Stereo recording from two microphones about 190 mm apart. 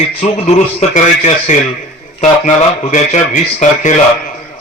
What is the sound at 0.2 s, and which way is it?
A man's voice, 35° left (ahead or behind).